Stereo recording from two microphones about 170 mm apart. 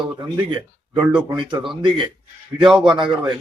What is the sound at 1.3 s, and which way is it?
A man's voice, 25° right (ahead or behind).